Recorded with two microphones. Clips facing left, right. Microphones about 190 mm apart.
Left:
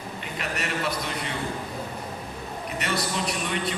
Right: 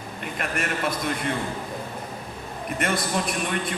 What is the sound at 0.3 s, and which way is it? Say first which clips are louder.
Speech: right 2 dB; 50° right (ahead or behind).